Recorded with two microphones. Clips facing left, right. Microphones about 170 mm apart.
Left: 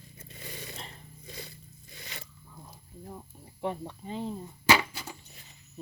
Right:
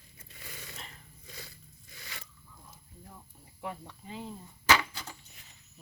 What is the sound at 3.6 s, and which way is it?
Speech, 30° left (ahead or behind).